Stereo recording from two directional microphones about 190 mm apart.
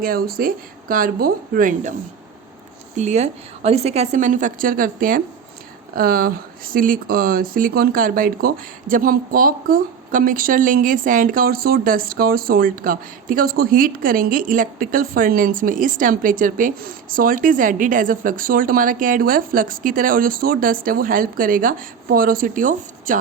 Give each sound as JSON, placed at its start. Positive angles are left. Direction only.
{"t": 0.0, "sound": "a woman's voice", "side_deg": -50}